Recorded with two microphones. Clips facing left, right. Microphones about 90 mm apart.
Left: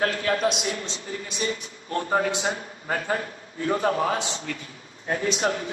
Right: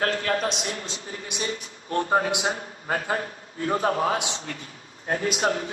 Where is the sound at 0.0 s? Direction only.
40° right (ahead or behind).